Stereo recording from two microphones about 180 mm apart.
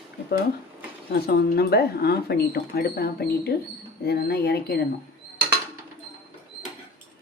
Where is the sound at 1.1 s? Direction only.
60° left (ahead or behind).